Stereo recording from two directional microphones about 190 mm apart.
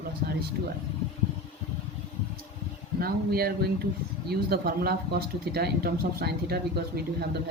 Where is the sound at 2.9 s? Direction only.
55° right (ahead or behind).